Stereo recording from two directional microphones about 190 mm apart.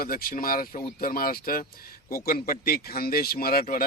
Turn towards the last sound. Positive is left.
turn(degrees=50)  # may be behind; listen again after turning